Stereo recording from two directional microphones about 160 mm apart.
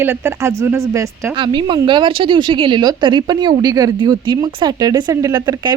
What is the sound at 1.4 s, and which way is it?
A woman's voice, 30° right (ahead or behind).